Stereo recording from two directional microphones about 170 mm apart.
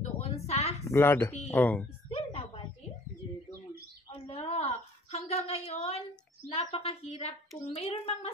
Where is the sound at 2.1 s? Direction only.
35° left (ahead or behind).